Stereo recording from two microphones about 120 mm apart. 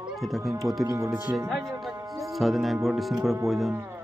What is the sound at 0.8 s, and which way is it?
Speech, 25° right (ahead or behind).